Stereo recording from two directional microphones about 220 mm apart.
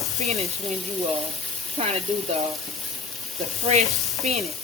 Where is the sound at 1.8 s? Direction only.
25° right (ahead or behind).